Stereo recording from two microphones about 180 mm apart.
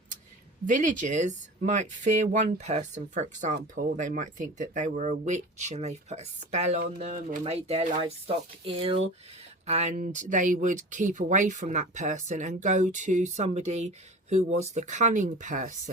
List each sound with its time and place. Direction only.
0.7 s speech: 45° right (ahead or behind)